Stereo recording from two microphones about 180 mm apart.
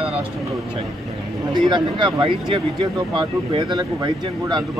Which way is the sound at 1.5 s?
25° right (ahead or behind).